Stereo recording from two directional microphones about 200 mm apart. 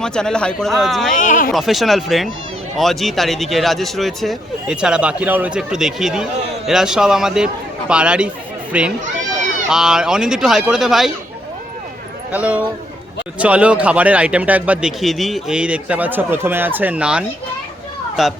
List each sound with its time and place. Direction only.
0.0 s speech: 5° left (ahead or behind)
1.1 s speech: 40° left (ahead or behind)
1.5 s a man's voice: centre (ahead or behind)
12.3 s a man's voice: 5° right (ahead or behind)